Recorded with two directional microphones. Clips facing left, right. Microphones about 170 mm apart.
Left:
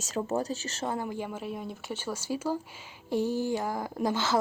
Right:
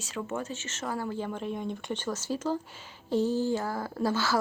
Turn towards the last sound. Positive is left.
turn(degrees=20)  # may be behind; listen again after turning